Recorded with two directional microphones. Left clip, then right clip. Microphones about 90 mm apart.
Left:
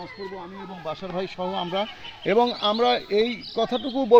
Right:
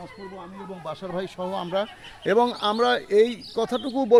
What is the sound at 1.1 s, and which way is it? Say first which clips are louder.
A man's voice: left 1 dB; 25° right (ahead or behind).